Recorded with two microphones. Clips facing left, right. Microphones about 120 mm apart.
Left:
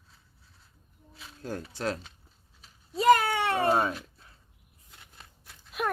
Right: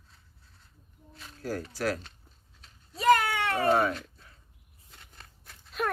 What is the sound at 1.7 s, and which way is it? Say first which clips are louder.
Speech: right 1 dB; 25° left (ahead or behind).